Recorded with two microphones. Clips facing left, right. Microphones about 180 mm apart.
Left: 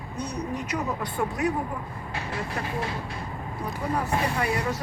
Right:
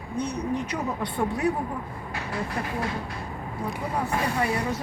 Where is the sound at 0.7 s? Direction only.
30° right (ahead or behind).